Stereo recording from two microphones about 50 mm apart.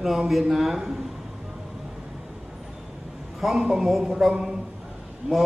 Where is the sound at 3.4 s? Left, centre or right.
Centre.